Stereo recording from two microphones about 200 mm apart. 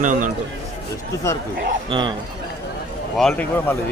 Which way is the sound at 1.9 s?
25° right (ahead or behind).